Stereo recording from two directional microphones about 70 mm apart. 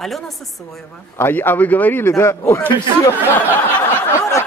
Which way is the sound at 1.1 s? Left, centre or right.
Left.